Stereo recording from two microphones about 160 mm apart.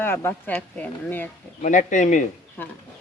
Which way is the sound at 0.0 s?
15° left (ahead or behind).